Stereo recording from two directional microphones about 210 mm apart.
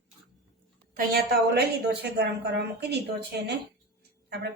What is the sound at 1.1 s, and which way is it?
Speech, 45° right (ahead or behind).